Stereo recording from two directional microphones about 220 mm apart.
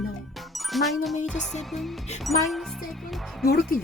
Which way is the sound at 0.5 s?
Centre (ahead or behind).